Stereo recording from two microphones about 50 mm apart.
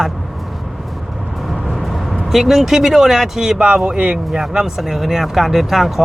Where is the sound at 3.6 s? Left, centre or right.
Centre.